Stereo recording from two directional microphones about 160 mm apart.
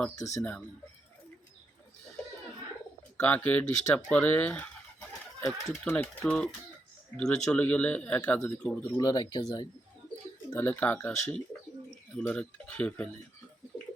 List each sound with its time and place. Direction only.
0.2 s speech: 20° left (ahead or behind)
3.2 s speech: 10° left (ahead or behind)
10.5 s speech: 15° left (ahead or behind)